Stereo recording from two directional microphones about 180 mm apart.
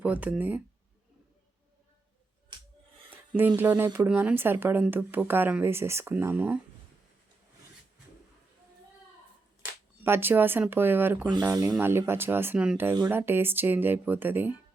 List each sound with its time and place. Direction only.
0.0 s speech: 10° right (ahead or behind)
3.6 s speech: 10° right (ahead or behind)
10.0 s speech: 10° right (ahead or behind)